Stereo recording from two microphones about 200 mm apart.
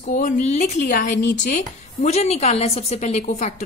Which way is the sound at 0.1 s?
40° left (ahead or behind).